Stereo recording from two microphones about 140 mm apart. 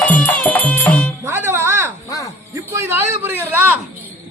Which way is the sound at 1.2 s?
20° right (ahead or behind).